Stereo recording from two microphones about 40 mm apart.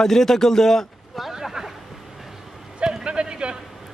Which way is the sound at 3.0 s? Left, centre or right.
Right.